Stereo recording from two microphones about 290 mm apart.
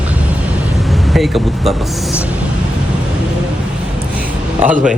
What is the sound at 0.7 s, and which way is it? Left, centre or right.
Speech, centre.